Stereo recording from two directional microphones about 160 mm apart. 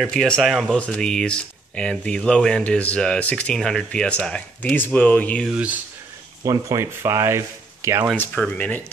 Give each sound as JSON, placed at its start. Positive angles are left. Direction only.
{"t": 0.0, "sound": "speech", "side_deg": 5}
{"t": 5.5, "sound": "speech", "side_deg": -5}
{"t": 6.4, "sound": "speech", "side_deg": -20}
{"t": 8.2, "sound": "speech", "side_deg": 10}